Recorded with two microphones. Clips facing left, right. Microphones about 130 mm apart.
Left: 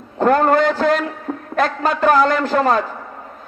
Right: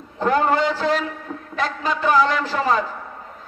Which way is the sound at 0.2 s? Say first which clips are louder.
Left 5 dB; 50° left (ahead or behind).